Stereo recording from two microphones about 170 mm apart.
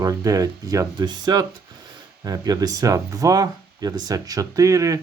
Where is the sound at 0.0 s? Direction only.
20° right (ahead or behind).